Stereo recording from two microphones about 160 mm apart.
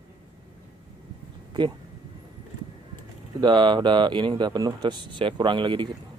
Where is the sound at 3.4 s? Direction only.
30° right (ahead or behind).